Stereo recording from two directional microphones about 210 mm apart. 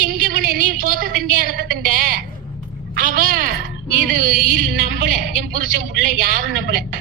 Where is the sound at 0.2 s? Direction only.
45° right (ahead or behind).